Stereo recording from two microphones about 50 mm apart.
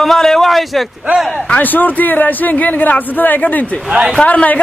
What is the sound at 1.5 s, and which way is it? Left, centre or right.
A man's voice, left.